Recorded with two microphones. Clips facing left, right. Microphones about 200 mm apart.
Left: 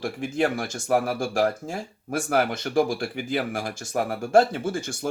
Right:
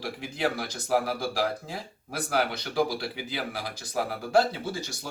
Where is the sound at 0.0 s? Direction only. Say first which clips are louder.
Left 5 dB; 50° left (ahead or behind).